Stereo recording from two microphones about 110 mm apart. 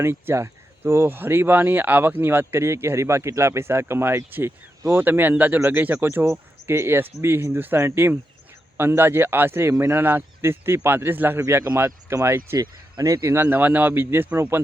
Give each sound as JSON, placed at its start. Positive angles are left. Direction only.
{"t": 0.0, "sound": "speech", "side_deg": -25}
{"t": 13.0, "sound": "speech", "side_deg": -35}
{"t": 13.3, "sound": "speech", "side_deg": -20}